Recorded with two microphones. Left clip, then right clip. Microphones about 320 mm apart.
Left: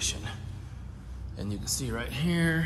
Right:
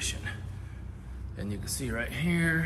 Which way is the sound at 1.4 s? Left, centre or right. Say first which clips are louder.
Left 2 dB; centre.